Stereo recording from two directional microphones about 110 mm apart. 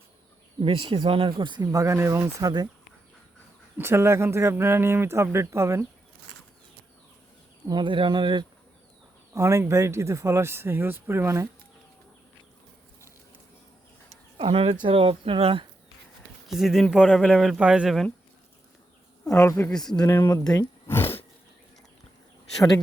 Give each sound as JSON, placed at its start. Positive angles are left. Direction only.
{"t": 0.6, "sound": "speech", "side_deg": -50}
{"t": 1.6, "sound": "speech", "side_deg": -30}
{"t": 3.8, "sound": "speech", "side_deg": -20}
{"t": 7.7, "sound": "speech", "side_deg": -45}
{"t": 9.3, "sound": "speech", "side_deg": -25}
{"t": 14.3, "sound": "speech", "side_deg": -60}
{"t": 16.5, "sound": "speech", "side_deg": -5}
{"t": 19.4, "sound": "a woman's voice", "side_deg": 20}
{"t": 19.7, "sound": "speech", "side_deg": 5}
{"t": 20.2, "sound": "speech", "side_deg": 35}
{"t": 20.8, "sound": "a sound", "side_deg": 20}